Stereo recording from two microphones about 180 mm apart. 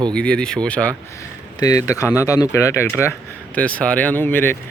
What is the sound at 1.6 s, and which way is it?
Speech, 20° left (ahead or behind).